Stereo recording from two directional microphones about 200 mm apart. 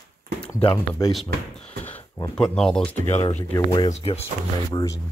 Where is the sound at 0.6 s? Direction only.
20° left (ahead or behind).